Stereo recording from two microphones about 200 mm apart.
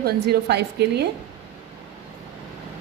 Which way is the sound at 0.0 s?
55° right (ahead or behind).